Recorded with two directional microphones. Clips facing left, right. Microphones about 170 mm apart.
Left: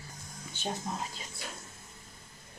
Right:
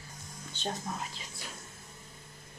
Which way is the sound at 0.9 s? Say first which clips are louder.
Left 1 dB; 20° left (ahead or behind).